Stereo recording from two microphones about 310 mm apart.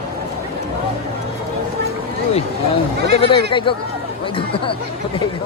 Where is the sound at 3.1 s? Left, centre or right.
Centre.